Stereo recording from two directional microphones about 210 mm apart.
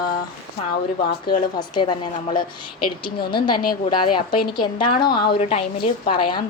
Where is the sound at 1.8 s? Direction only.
20° left (ahead or behind).